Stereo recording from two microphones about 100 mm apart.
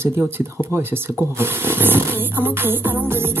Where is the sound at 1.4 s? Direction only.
20° right (ahead or behind).